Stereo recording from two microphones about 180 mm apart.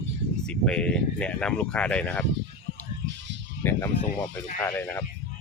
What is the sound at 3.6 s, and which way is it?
Speech, 10° left (ahead or behind).